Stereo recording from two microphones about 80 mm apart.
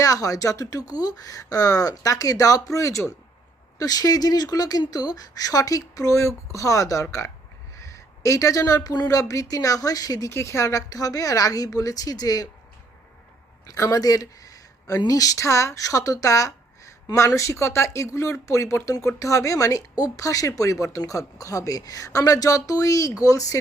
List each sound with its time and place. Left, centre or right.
0.0 s speech: left
10.2 s speech: left
13.7 s speech: left